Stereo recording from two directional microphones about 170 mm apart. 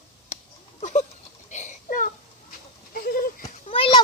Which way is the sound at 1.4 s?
45° left (ahead or behind).